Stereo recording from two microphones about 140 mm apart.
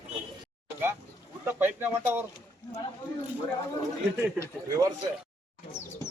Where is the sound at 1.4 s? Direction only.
15° right (ahead or behind).